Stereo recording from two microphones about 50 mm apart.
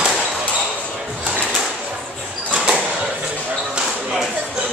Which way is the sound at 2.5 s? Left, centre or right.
Right.